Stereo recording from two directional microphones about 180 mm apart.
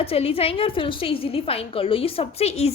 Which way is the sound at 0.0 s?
35° left (ahead or behind).